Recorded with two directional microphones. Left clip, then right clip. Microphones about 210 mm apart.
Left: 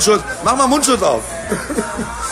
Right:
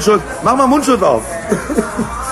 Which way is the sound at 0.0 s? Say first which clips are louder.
Right 2 dB; centre (ahead or behind).